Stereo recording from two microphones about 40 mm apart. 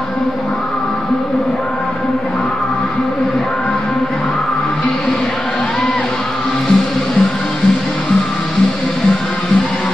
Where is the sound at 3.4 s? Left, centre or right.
Centre.